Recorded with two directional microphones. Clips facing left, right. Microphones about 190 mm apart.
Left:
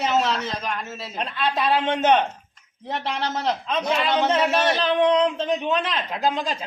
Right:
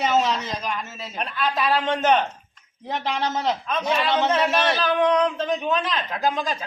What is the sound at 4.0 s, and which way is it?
A man's voice, 15° left (ahead or behind).